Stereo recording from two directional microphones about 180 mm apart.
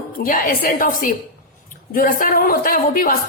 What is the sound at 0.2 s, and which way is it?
A man's voice, 50° left (ahead or behind).